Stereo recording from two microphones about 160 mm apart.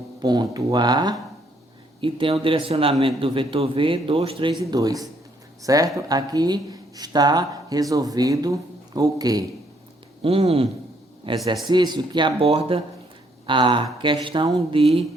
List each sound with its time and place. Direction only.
0.2 s speech: 25° right (ahead or behind)
4.6 s speech: 20° right (ahead or behind)
10.2 s speech: 35° right (ahead or behind)